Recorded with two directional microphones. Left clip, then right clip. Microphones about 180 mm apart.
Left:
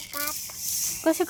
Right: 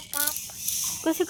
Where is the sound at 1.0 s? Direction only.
5° left (ahead or behind).